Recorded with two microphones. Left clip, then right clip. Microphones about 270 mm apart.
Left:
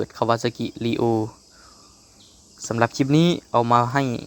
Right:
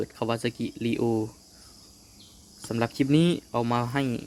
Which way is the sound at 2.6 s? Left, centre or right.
Centre.